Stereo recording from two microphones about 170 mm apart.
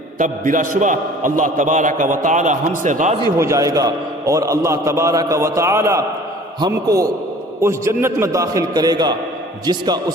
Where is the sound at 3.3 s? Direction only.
20° right (ahead or behind).